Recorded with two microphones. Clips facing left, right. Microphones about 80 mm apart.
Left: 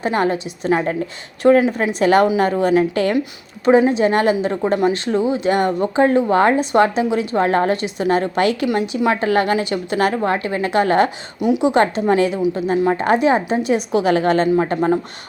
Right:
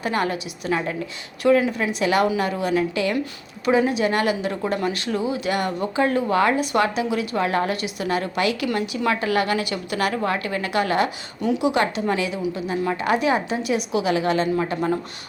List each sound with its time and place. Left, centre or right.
0.0 s speech: left
11.3 s speech: centre
11.6 s speech: left